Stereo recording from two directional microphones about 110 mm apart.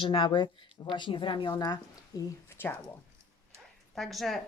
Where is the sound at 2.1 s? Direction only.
35° left (ahead or behind).